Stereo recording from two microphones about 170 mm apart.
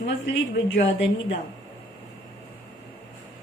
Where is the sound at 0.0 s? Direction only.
90° left.